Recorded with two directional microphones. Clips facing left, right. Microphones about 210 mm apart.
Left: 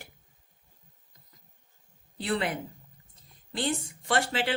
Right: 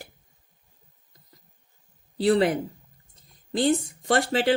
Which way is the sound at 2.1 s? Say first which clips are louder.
Right 9 dB; 35° right (ahead or behind).